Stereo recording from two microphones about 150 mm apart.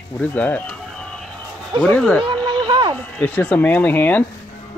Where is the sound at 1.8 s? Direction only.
5° left (ahead or behind).